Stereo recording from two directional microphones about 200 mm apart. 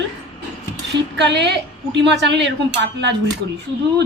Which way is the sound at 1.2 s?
60° right (ahead or behind).